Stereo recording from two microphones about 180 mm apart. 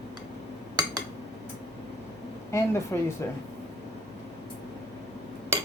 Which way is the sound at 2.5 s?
15° left (ahead or behind).